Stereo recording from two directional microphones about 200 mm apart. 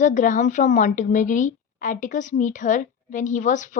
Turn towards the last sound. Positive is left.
turn(degrees=40)  # may be behind; listen again after turning